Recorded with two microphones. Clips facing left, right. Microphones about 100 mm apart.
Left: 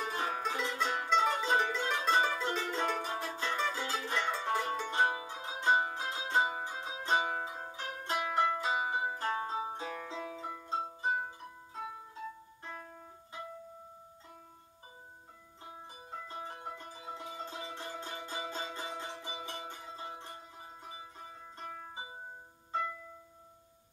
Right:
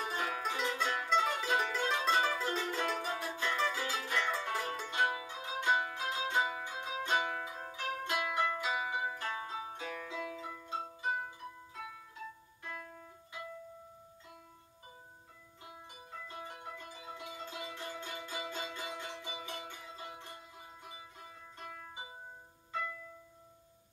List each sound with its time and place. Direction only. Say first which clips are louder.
0.0 s music: left 1 dB; 30° left (ahead or behind)
1.1 s mandolin: left 3 dB; 30° left (ahead or behind)
3.1 s music: even; 25° left (ahead or behind)
15.6 s music: left 3 dB; 35° left (ahead or behind)